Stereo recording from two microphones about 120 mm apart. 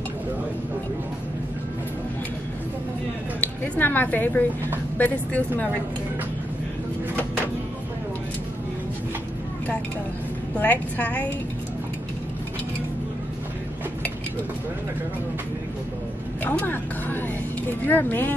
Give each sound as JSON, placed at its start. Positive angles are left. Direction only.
{"t": 3.3, "sound": "speech", "side_deg": 10}
{"t": 10.6, "sound": "speech", "side_deg": 10}
{"t": 16.4, "sound": "speech", "side_deg": 15}